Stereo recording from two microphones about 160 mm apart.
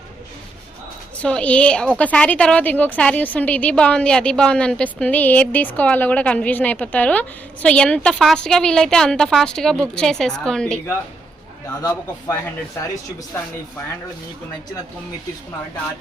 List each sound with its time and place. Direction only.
1.2 s a woman's voice: 5° left (ahead or behind)
11.8 s a man's voice: 20° left (ahead or behind)